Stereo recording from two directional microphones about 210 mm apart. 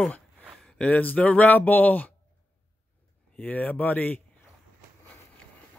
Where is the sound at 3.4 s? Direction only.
5° left (ahead or behind).